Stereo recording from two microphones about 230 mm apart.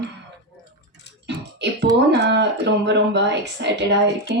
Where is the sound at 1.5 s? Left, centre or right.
Right.